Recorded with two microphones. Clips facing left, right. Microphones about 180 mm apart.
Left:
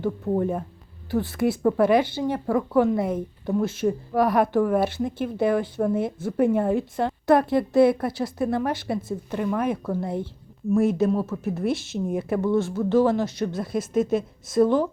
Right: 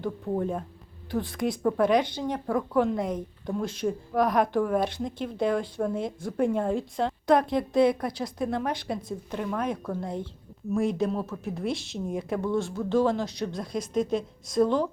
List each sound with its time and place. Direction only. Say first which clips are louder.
0.0 s speech: left 5 dB; 5° left (ahead or behind)